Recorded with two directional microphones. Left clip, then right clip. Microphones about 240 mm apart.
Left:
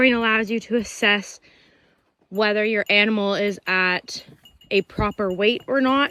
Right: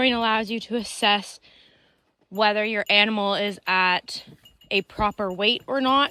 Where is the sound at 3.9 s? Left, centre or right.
Centre.